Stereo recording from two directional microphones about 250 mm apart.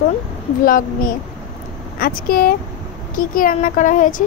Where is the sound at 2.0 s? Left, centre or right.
Left.